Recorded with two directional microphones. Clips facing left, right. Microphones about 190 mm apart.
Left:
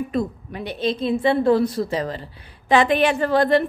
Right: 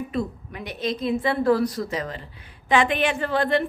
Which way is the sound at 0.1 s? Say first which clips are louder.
Left 3 dB; 35° left (ahead or behind).